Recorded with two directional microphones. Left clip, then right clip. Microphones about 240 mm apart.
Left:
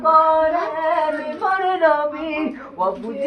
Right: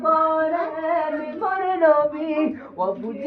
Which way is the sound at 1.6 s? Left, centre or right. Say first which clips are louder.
Even; centre.